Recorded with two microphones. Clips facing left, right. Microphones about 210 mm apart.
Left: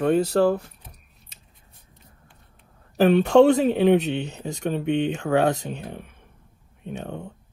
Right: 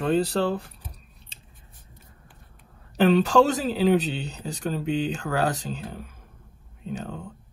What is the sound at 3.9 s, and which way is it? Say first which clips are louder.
Speech: left 3 dB; 70° left (ahead or behind).